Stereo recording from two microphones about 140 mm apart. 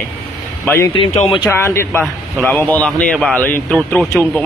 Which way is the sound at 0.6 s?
15° left (ahead or behind).